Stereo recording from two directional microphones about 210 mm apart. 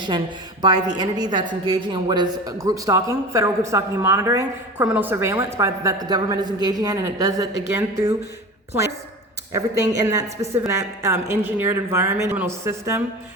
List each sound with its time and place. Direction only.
0.6 s a woman's voice: 20° right (ahead or behind)
9.5 s a woman's voice: 15° right (ahead or behind)